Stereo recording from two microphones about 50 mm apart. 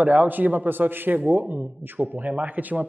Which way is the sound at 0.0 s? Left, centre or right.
Right.